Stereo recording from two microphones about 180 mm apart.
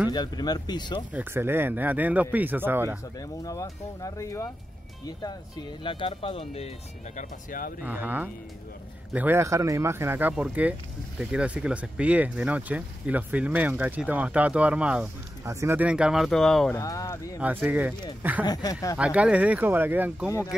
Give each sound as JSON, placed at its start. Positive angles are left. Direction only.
{"t": 0.1, "sound": "speech", "side_deg": 25}
{"t": 1.1, "sound": "speech", "side_deg": -10}
{"t": 3.2, "sound": "speech", "side_deg": 20}
{"t": 5.9, "sound": "speech", "side_deg": 30}
{"t": 7.2, "sound": "speech", "side_deg": 50}
{"t": 7.8, "sound": "speech", "side_deg": -10}
{"t": 16.7, "sound": "speech", "side_deg": 20}
{"t": 17.4, "sound": "speech", "side_deg": -10}
{"t": 18.4, "sound": "speech", "side_deg": 20}
{"t": 18.9, "sound": "speech", "side_deg": -5}